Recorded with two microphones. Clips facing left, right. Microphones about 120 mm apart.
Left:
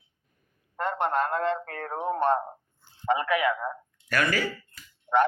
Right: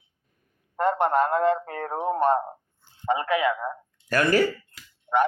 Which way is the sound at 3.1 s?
25° right (ahead or behind).